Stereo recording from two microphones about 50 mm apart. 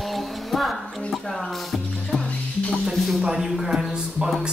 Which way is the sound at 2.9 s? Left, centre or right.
Centre.